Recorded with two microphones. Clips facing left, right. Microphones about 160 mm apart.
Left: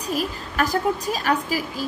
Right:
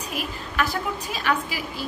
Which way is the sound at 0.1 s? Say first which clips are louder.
Left 7 dB; 40° left (ahead or behind).